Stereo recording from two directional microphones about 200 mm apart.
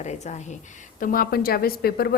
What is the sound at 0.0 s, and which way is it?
A woman's voice, 35° left (ahead or behind).